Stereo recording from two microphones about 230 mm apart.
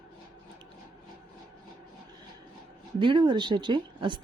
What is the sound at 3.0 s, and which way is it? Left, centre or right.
Speech, right.